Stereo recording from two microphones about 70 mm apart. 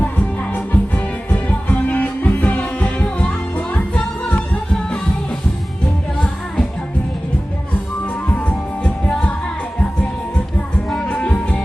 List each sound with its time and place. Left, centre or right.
0.0 s music: left
6.1 s music: centre
8.3 s music: centre
11.1 s music: centre